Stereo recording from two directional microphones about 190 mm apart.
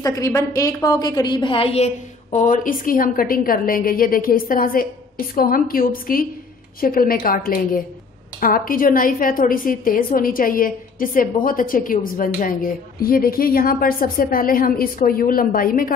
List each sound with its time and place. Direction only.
0.0 s a woman's voice: 15° left (ahead or behind)
2.3 s a woman's voice: 45° left (ahead or behind)